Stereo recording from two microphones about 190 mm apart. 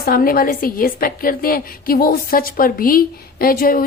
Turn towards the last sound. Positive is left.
turn(degrees=50)  # may be behind; listen again after turning